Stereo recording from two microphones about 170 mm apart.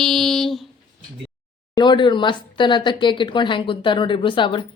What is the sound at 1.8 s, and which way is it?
Speech, 25° left (ahead or behind).